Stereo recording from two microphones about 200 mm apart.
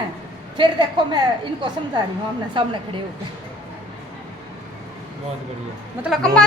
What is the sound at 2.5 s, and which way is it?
Speech, 25° right (ahead or behind).